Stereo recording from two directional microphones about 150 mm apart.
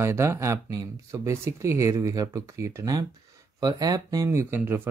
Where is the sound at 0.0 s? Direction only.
15° right (ahead or behind).